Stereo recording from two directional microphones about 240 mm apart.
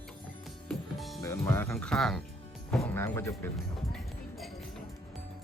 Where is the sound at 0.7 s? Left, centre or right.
Centre.